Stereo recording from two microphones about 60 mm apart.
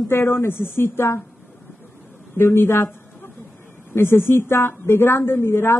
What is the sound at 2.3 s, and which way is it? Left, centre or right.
Speech, left.